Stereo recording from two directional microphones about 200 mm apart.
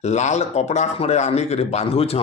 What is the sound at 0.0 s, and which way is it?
A man's voice, 35° left (ahead or behind).